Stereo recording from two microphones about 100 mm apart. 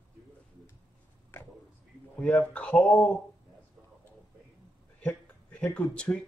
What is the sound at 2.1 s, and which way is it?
Speech, 15° left (ahead or behind).